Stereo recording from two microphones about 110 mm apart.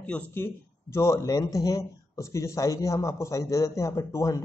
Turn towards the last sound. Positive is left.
turn(degrees=30)  # may be behind; listen again after turning